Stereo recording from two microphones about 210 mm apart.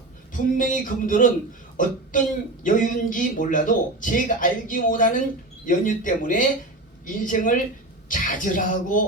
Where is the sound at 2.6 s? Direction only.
40° left (ahead or behind).